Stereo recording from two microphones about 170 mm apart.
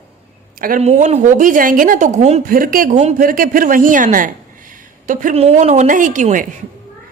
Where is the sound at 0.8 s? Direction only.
40° right (ahead or behind).